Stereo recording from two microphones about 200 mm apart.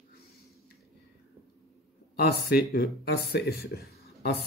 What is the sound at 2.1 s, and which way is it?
Speech, 50° left (ahead or behind).